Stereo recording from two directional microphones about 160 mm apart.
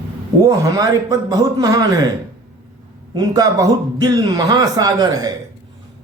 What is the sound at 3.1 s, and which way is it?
A man's voice, 20° right (ahead or behind).